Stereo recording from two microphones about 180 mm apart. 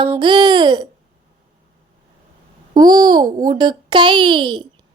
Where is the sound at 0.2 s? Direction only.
25° right (ahead or behind).